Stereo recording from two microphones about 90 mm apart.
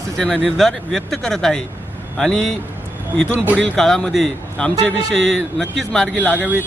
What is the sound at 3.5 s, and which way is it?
A man's voice, 5° left (ahead or behind).